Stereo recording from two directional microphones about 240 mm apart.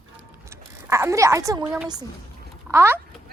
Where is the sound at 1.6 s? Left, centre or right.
Centre.